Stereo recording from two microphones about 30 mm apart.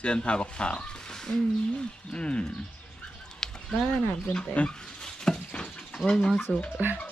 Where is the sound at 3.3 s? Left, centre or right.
Left.